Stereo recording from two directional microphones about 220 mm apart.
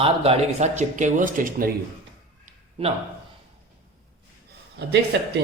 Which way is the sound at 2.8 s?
30° right (ahead or behind).